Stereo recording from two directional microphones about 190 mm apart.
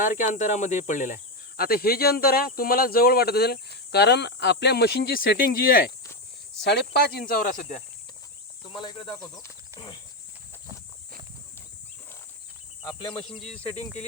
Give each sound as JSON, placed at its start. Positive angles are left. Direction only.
{"t": 0.0, "sound": "speech", "side_deg": 40}
{"t": 6.6, "sound": "speech", "side_deg": 60}
{"t": 13.0, "sound": "speech", "side_deg": 25}